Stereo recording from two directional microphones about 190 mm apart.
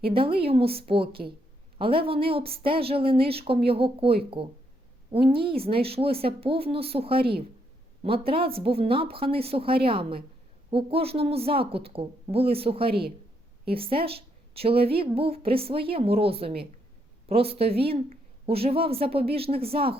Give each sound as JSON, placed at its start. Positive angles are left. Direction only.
{"t": 0.1, "sound": "a woman's voice", "side_deg": -30}
{"t": 8.3, "sound": "a woman's voice", "side_deg": -30}
{"t": 12.9, "sound": "a woman's voice", "side_deg": -55}
{"t": 13.7, "sound": "a woman's voice", "side_deg": -30}